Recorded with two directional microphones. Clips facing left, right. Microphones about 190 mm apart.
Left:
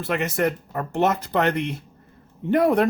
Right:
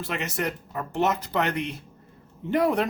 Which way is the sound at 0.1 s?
55° left (ahead or behind).